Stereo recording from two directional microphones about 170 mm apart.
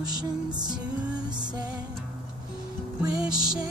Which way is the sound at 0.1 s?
25° right (ahead or behind).